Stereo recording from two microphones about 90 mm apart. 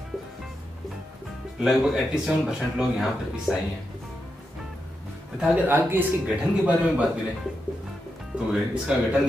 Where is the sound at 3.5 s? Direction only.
5° right (ahead or behind).